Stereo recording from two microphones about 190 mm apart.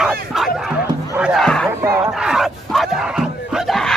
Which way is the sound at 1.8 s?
5° right (ahead or behind).